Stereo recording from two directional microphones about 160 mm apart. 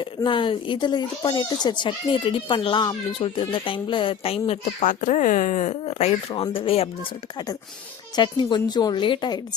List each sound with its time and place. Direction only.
0.0 s speech: 30° left (ahead or behind)
8.1 s a woman's voice: 30° left (ahead or behind)